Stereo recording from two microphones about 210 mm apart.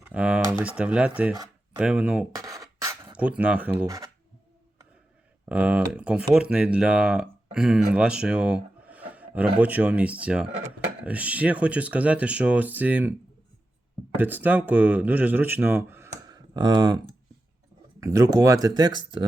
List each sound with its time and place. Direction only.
0.0 s speech: 5° right (ahead or behind)
2.3 s a sound: 15° right (ahead or behind)
5.5 s speech: 5° right (ahead or behind)
7.9 s a sound: 5° right (ahead or behind)
9.6 s speech: 5° right (ahead or behind)
14.2 s speech: 10° right (ahead or behind)
18.0 s speech: 15° right (ahead or behind)